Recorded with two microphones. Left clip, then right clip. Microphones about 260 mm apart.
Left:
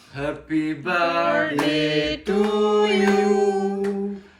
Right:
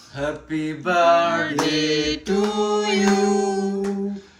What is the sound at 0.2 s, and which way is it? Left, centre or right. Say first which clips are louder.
Mantra: left 1 dB; centre.